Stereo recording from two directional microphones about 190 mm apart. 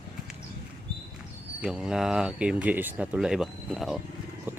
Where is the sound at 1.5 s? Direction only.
5° right (ahead or behind).